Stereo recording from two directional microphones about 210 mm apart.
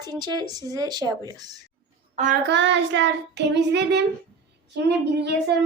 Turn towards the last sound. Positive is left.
turn(degrees=-55)  # may be behind; listen again after turning